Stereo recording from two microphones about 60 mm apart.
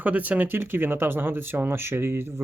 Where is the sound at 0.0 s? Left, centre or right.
Right.